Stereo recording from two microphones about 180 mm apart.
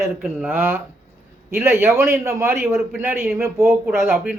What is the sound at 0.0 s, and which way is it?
A man's voice, 10° right (ahead or behind).